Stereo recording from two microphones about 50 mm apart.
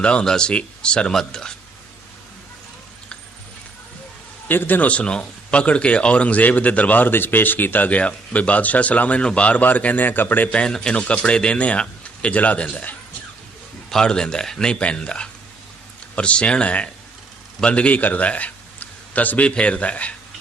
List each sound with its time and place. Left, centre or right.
0.0 s a man's voice: centre
4.4 s a man's voice: left
4.9 s a man's voice: left
7.9 s a man's voice: left
10.7 s a man's voice: centre
13.9 s a man's voice: centre